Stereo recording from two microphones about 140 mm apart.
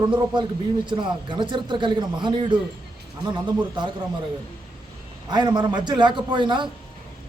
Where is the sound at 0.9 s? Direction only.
35° right (ahead or behind).